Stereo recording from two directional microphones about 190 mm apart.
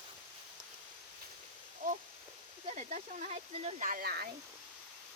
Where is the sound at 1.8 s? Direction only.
45° right (ahead or behind).